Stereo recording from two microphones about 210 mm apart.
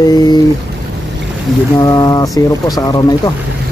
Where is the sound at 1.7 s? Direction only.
15° left (ahead or behind).